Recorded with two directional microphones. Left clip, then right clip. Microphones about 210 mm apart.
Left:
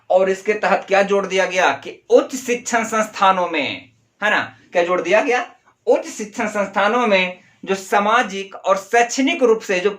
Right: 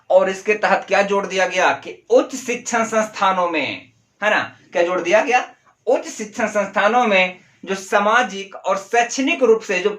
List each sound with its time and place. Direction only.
0.1 s speech: 5° left (ahead or behind); by 9.9 s 25° left (ahead or behind)